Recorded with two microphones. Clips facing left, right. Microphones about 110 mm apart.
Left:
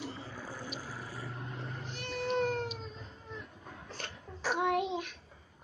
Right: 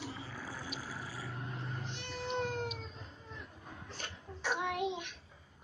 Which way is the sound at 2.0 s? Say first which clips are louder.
Left 6 dB; 50° left (ahead or behind).